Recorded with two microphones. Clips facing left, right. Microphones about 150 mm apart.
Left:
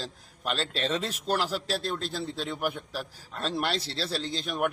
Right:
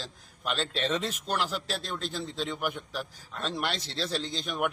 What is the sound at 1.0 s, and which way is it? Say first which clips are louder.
Speech: left 2 dB; 35° left (ahead or behind).